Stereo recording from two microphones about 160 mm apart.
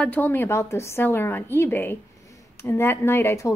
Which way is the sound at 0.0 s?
10° left (ahead or behind).